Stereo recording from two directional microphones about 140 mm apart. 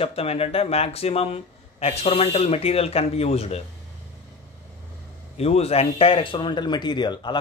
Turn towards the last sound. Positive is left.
turn(degrees=30)  # may be behind; listen again after turning